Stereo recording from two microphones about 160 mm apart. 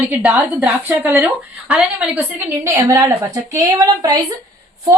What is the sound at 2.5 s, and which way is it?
A woman's voice, 15° right (ahead or behind).